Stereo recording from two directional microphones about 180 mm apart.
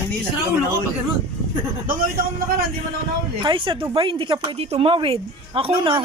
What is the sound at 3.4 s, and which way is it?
A woman's voice, 30° right (ahead or behind).